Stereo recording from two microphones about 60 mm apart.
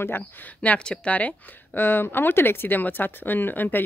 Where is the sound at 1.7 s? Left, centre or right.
Left.